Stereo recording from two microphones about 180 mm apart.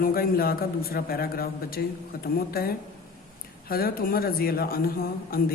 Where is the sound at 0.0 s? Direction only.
55° left (ahead or behind).